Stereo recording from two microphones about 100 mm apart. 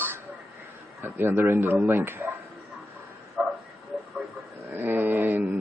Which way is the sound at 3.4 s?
15° right (ahead or behind).